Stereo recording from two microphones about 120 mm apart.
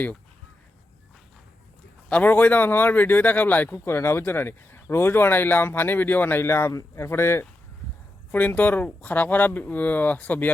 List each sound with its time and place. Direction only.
2.0 s speech: 10° left (ahead or behind)